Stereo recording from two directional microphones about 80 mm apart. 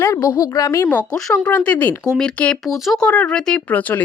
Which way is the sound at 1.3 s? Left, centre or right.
Centre.